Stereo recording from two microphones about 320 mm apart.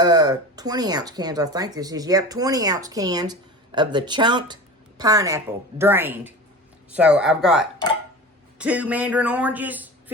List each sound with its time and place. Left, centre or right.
0.0 s a man's voice: centre